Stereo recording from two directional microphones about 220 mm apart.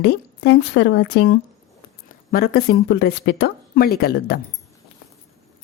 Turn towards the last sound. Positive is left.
turn(degrees=45)  # may be behind; listen again after turning